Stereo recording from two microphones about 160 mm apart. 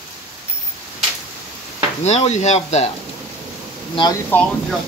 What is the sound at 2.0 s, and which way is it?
Speech, 45° left (ahead or behind).